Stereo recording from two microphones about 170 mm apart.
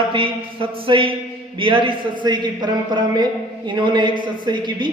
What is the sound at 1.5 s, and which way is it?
Speech, 30° right (ahead or behind).